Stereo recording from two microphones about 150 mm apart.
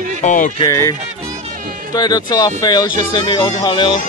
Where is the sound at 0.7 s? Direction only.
20° left (ahead or behind).